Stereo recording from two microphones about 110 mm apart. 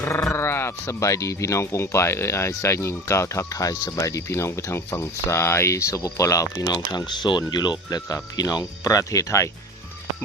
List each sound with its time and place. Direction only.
0.0 s speech: 25° left (ahead or behind)